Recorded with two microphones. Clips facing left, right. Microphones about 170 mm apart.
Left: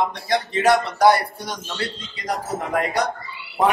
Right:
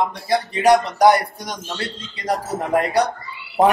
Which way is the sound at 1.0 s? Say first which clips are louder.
Right 2 dB; 20° right (ahead or behind).